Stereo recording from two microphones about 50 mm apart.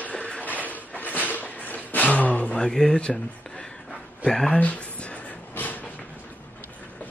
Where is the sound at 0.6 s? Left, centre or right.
Left.